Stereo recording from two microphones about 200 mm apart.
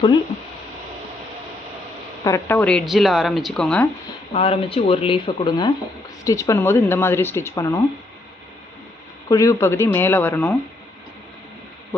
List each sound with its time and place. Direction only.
2.2 s speech: 10° left (ahead or behind)
4.4 s speech: 30° left (ahead or behind)
9.3 s speech: 15° left (ahead or behind)